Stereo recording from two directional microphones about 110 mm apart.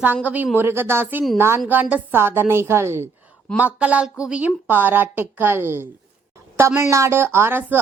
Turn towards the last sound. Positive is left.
turn(degrees=-20)  # may be behind; listen again after turning